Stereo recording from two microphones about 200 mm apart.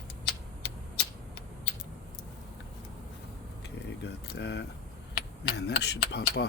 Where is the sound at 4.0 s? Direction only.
55° left (ahead or behind).